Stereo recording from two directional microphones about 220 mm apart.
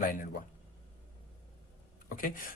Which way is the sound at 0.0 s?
40° left (ahead or behind).